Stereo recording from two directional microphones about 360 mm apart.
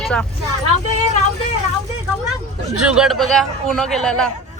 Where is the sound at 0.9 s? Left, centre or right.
Centre.